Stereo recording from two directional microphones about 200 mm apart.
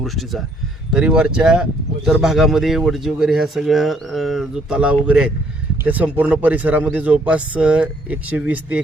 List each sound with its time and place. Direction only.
0.0 s speech: centre (ahead or behind)